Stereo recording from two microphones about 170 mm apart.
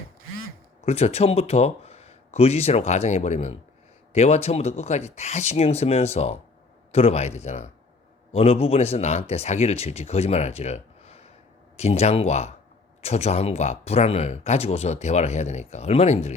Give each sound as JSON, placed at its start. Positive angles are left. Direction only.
{"t": 0.9, "sound": "speech", "side_deg": 40}